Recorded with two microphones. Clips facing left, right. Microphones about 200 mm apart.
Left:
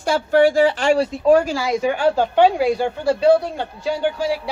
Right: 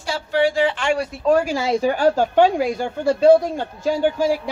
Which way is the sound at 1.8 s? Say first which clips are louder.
Even; 40° right (ahead or behind).